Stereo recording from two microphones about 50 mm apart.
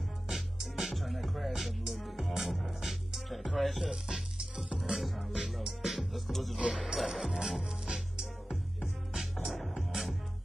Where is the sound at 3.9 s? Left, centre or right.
Centre.